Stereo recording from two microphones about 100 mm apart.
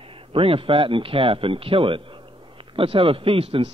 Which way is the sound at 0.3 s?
65° right (ahead or behind).